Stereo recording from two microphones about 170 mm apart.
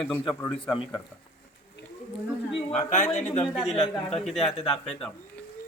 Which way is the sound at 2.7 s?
45° left (ahead or behind).